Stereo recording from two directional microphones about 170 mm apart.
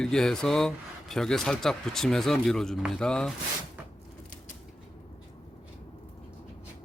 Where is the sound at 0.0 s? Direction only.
5° left (ahead or behind).